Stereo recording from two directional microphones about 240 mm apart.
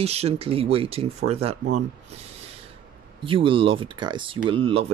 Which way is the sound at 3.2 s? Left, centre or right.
Right.